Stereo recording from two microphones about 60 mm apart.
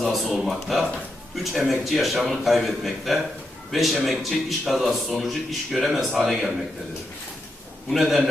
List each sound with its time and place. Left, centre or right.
0.0 s a man's voice: centre
7.9 s a man's voice: centre